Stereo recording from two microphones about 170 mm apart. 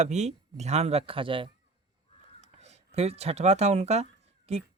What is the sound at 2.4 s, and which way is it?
Speech, 40° right (ahead or behind).